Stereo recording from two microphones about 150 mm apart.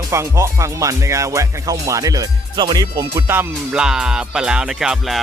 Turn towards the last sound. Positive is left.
turn(degrees=0)  # may be behind; listen again after turning